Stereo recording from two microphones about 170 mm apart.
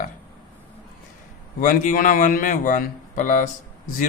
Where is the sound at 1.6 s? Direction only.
50° left (ahead or behind).